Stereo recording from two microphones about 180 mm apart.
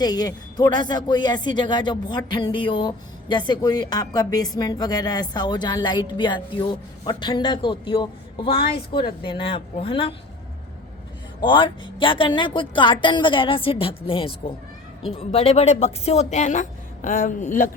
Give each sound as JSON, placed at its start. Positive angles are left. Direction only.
{"t": 0.0, "sound": "speech", "side_deg": 20}
{"t": 11.3, "sound": "a woman's voice", "side_deg": 25}